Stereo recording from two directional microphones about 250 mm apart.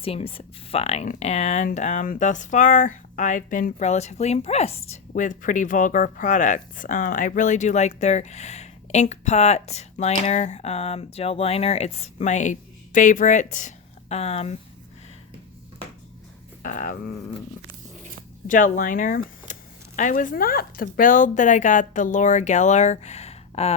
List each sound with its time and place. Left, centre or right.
0.0 s speech: left
16.6 s a sound: left
18.4 s speech: left